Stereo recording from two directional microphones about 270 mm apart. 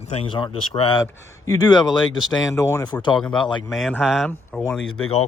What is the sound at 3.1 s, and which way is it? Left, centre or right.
Speech, centre.